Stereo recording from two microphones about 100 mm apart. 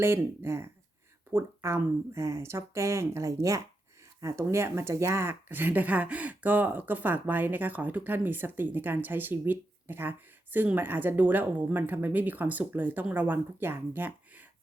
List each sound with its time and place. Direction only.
0.0 s speech: 25° right (ahead or behind)